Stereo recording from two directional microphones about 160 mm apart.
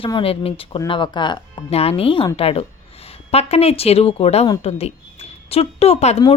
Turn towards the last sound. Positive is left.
turn(degrees=40)  # may be behind; listen again after turning